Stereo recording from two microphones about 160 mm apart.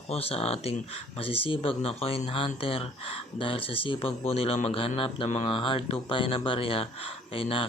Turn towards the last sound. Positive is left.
turn(degrees=35)  # may be behind; listen again after turning